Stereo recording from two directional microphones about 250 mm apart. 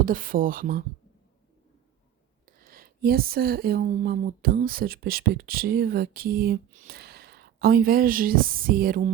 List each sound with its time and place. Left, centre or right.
0.0 s speech: right
2.5 s speech: right